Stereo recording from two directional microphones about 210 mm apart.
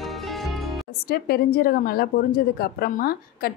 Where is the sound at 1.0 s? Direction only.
45° left (ahead or behind).